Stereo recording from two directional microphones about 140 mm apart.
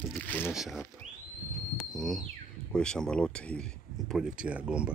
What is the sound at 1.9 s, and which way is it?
Speech, centre (ahead or behind).